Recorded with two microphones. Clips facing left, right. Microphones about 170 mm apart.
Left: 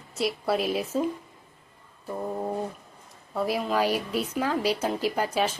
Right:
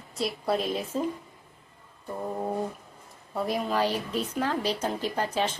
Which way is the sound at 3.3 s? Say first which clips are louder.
Left 2 dB; centre (ahead or behind).